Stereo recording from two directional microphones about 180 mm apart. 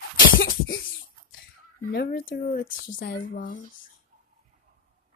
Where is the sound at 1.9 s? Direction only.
60° left (ahead or behind).